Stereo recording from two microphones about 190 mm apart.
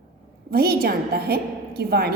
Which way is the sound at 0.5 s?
55° right (ahead or behind).